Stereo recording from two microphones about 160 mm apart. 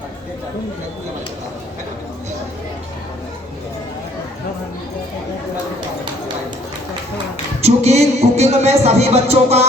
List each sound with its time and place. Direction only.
7.6 s music: 45° right (ahead or behind)